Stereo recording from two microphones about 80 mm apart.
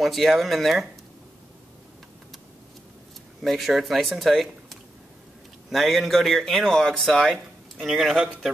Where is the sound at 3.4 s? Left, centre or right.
Centre.